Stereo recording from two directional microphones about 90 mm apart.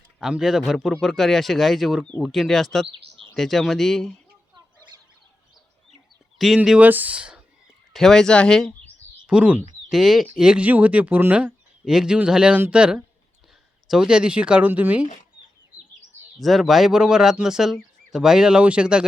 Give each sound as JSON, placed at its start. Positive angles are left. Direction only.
{"t": 0.2, "sound": "speech", "side_deg": -5}
{"t": 6.4, "sound": "speech", "side_deg": 0}
{"t": 6.7, "sound": "speech", "side_deg": -20}
{"t": 7.9, "sound": "speech", "side_deg": 5}
{"t": 9.2, "sound": "speech", "side_deg": -10}
{"t": 11.9, "sound": "speech", "side_deg": -5}
{"t": 16.4, "sound": "speech", "side_deg": 0}